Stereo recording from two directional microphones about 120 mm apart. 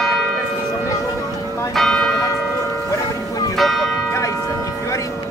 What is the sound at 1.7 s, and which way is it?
Church bell, centre (ahead or behind).